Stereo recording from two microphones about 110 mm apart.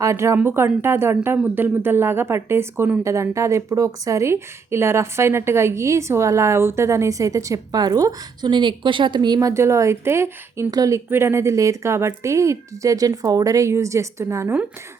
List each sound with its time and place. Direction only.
0.0 s speech: 25° right (ahead or behind)